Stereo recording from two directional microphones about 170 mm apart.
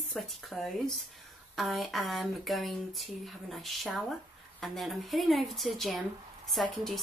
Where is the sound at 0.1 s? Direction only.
Centre (ahead or behind).